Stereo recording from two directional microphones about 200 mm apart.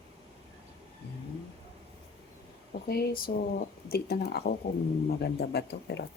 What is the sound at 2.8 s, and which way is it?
Speech, 50° left (ahead or behind).